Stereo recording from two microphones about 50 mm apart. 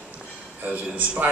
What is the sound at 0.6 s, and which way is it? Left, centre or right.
Speech, right.